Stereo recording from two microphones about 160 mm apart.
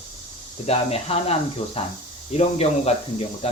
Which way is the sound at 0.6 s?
40° left (ahead or behind).